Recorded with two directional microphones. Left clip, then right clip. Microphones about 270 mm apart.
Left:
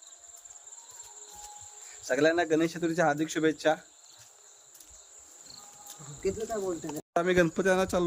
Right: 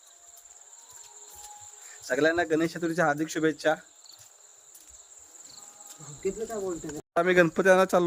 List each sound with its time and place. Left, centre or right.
2.0 s a man's voice: centre
6.2 s speech: left
7.2 s speech: centre